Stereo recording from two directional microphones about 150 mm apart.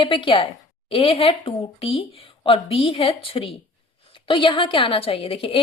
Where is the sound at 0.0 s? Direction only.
35° left (ahead or behind).